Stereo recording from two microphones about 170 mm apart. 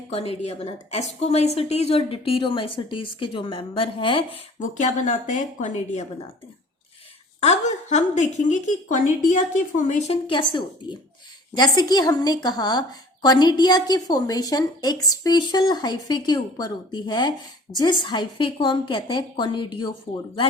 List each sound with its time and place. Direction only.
0.1 s a woman's voice: 35° left (ahead or behind)
4.6 s a woman's voice: 45° left (ahead or behind)
7.4 s a woman's voice: 45° left (ahead or behind)
10.2 s a woman's voice: 30° left (ahead or behind)